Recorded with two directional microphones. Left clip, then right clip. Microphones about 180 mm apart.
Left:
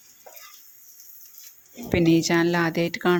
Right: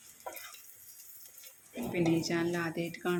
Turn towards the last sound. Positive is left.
turn(degrees=45)  # may be behind; listen again after turning